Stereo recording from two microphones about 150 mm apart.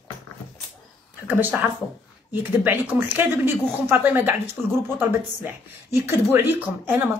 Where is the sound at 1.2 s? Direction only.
10° right (ahead or behind).